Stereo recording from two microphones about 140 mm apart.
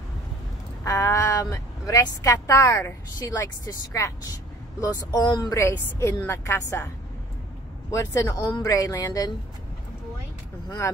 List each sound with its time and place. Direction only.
0.8 s a woman's voice: 25° left (ahead or behind)
7.9 s a woman's voice: 20° left (ahead or behind)